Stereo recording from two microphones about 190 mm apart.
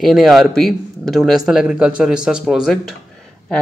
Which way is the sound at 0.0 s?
Centre (ahead or behind).